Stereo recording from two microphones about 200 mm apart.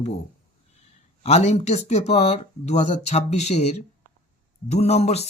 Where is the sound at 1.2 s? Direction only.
35° left (ahead or behind).